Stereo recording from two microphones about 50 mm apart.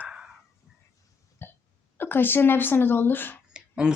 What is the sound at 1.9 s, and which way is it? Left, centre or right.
Speech, left.